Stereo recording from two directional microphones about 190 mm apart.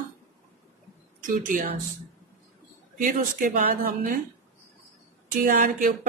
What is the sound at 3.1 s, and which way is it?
Speech, 45° right (ahead or behind).